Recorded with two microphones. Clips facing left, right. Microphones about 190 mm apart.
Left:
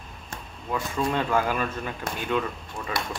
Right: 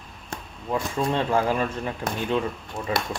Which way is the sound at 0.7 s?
30° right (ahead or behind).